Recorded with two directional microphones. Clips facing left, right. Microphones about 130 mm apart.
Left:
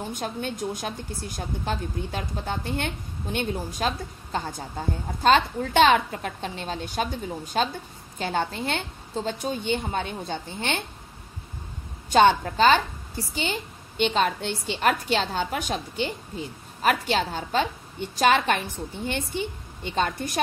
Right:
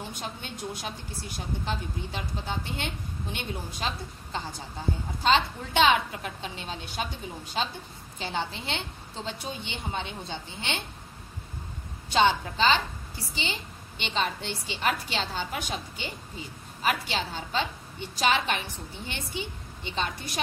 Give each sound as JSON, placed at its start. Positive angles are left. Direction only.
{"t": 0.1, "sound": "a woman's voice", "side_deg": 50}
{"t": 12.1, "sound": "a woman's voice", "side_deg": 50}